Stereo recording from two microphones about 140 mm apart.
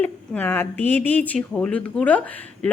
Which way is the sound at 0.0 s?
10° left (ahead or behind).